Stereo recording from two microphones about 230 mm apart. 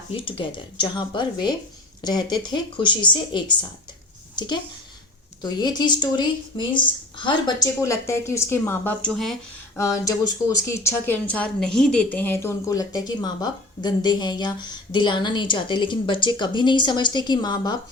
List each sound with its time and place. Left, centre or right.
0.1 s a woman's voice: left; by 9.3 s centre
9.7 s a woman's voice: centre